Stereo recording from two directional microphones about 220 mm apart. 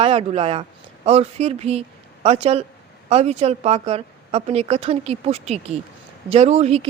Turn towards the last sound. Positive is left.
turn(degrees=-30)  # may be behind; listen again after turning